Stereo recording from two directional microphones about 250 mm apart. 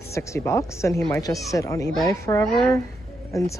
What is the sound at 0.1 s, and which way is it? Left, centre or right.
Speech, centre.